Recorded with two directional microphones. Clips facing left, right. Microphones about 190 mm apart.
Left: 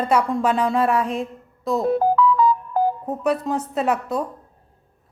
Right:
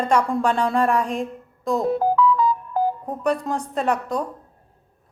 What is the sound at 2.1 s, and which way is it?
Music, 55° left (ahead or behind).